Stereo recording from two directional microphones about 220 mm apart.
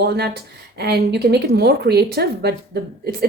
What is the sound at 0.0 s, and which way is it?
A woman's voice, 45° right (ahead or behind).